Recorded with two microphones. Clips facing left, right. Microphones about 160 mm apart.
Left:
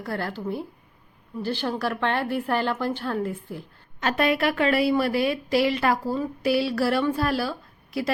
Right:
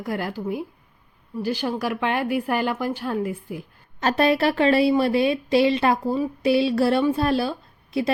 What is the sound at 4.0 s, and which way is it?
A woman's voice, 35° right (ahead or behind).